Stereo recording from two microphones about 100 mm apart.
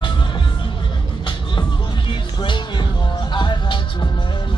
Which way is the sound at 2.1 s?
55° left (ahead or behind).